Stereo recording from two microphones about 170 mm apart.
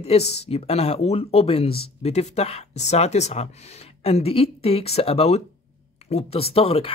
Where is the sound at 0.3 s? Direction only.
35° left (ahead or behind).